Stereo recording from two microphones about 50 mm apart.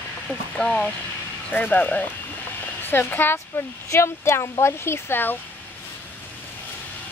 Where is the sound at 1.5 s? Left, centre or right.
Left.